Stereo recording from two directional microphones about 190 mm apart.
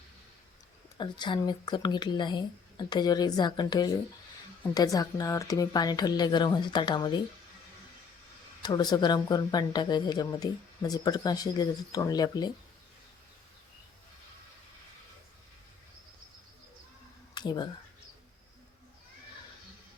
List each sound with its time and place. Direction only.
0.9 s speech: 25° left (ahead or behind)
8.6 s speech: 20° left (ahead or behind)
17.3 s speech: 20° left (ahead or behind)